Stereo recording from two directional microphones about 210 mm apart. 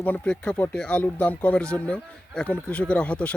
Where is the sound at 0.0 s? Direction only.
5° left (ahead or behind).